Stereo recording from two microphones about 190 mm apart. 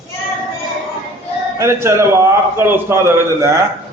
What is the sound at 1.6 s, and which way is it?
A man's voice, 15° right (ahead or behind).